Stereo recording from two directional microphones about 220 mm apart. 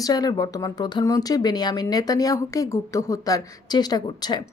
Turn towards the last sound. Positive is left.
turn(degrees=20)  # may be behind; listen again after turning